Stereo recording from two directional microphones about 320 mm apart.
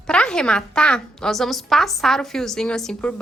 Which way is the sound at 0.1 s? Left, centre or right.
Centre.